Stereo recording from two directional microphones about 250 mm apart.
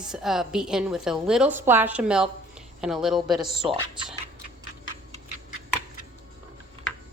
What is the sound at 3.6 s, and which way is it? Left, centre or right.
Speech, right.